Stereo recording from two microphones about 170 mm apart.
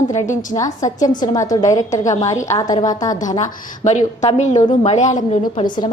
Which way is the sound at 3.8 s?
40° left (ahead or behind).